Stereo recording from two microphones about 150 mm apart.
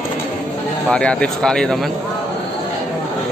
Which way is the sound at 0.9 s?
5° left (ahead or behind).